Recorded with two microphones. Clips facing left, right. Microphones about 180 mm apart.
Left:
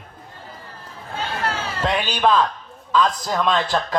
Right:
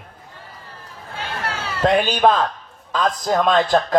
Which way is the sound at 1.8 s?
50° right (ahead or behind).